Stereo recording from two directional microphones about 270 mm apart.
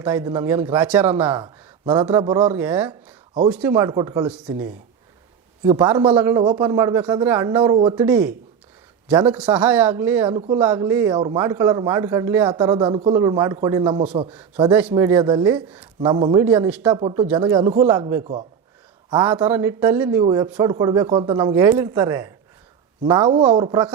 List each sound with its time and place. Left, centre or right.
0.0 s a man's voice: centre
5.6 s a man's voice: centre
8.0 s a man's voice: centre
10.2 s speech: right
10.6 s a man's voice: centre
14.3 s a man's voice: centre
15.5 s speech: centre
16.0 s a man's voice: centre
16.8 s a man's voice: centre
18.2 s speech: right
19.1 s a man's voice: centre